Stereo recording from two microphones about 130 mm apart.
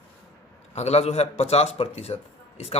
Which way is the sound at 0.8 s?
55° left (ahead or behind).